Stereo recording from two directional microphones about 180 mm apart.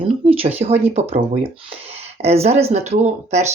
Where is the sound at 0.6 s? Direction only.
35° right (ahead or behind).